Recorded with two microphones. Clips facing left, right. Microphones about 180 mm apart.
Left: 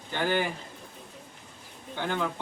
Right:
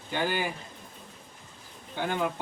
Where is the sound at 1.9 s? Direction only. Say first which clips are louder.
Right 1 dB; 15° right (ahead or behind).